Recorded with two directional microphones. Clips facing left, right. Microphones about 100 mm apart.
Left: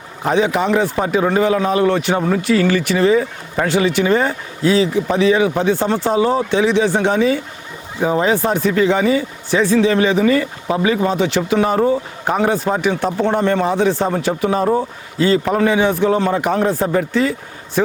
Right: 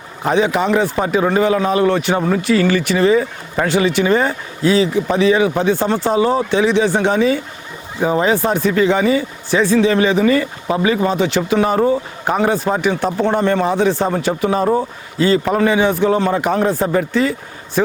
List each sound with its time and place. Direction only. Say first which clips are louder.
0.3 s speech: right 1 dB; 20° right (ahead or behind)